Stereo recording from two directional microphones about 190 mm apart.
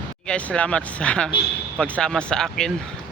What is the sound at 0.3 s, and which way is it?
Speech, 5° left (ahead or behind).